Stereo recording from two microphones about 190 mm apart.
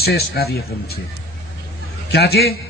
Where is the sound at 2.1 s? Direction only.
60° left (ahead or behind).